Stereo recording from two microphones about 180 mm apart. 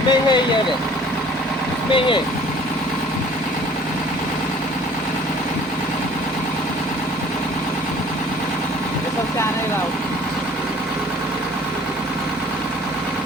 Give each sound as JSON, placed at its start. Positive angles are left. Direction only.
{"t": 0.1, "sound": "speech", "side_deg": 25}
{"t": 1.9, "sound": "speech", "side_deg": 30}